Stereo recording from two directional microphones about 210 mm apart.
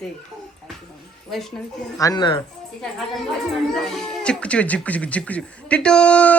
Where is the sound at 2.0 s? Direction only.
20° left (ahead or behind).